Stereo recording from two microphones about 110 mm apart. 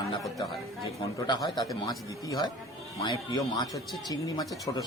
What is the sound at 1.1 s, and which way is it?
A man's voice, 40° left (ahead or behind).